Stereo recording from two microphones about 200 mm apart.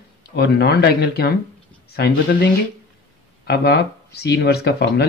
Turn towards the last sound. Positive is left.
turn(degrees=55)  # may be behind; listen again after turning